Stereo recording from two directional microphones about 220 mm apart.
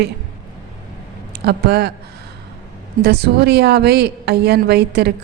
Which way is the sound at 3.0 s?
50° right (ahead or behind).